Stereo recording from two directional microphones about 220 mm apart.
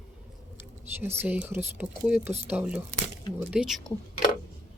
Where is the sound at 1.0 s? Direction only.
10° right (ahead or behind).